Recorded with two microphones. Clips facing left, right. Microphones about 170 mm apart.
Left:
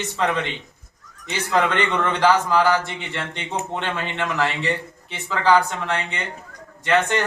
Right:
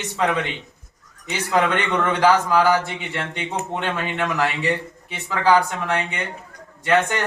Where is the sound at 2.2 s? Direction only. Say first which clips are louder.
Right 1 dB; 10° right (ahead or behind).